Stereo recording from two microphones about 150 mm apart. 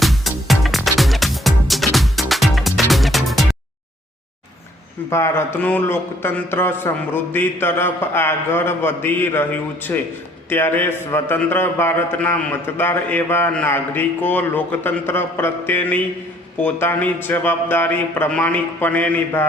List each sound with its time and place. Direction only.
0.0 s music: centre (ahead or behind)
5.0 s a man's voice: 15° left (ahead or behind)